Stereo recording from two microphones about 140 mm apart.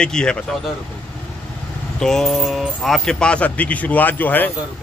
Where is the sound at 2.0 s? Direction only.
5° left (ahead or behind).